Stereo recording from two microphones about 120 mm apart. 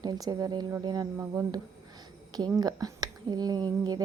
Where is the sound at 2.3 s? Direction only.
35° right (ahead or behind).